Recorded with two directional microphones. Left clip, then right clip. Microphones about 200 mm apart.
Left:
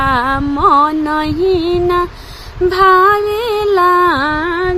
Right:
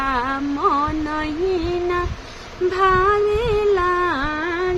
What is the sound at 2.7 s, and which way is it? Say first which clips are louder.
Music: left 8 dB; 50° left (ahead or behind).